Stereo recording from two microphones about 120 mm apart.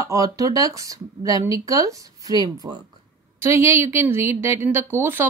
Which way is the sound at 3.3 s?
20° right (ahead or behind).